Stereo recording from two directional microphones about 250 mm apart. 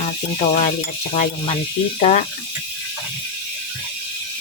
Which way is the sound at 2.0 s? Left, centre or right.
Left.